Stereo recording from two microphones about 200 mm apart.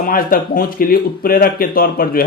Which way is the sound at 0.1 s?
45° left (ahead or behind).